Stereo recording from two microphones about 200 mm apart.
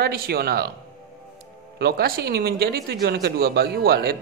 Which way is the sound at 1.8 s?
50° right (ahead or behind).